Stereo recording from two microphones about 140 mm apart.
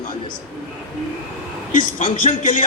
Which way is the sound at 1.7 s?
60° left (ahead or behind).